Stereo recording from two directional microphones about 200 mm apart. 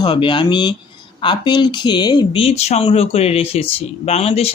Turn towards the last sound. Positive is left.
turn(degrees=30)  # may be behind; listen again after turning